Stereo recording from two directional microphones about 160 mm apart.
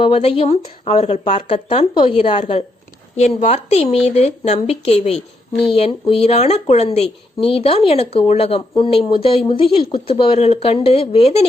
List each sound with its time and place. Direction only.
0.0 s a woman's voice: 35° left (ahead or behind)